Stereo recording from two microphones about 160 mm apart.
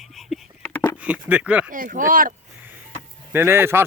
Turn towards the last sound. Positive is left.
turn(degrees=-15)  # may be behind; listen again after turning